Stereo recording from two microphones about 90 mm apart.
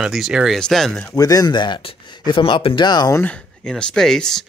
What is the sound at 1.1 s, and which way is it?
Speech, 45° left (ahead or behind).